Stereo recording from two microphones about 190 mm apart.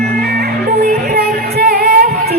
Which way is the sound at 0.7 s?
55° right (ahead or behind).